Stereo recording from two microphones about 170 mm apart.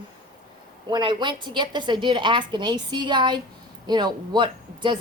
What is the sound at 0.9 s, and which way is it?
Speech, 25° right (ahead or behind).